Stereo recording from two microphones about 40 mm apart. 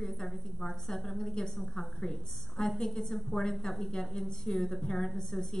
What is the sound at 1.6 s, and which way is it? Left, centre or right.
A woman's voice, centre.